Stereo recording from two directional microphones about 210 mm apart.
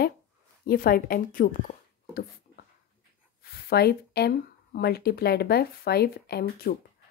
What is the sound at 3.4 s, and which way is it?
Speech, 45° left (ahead or behind).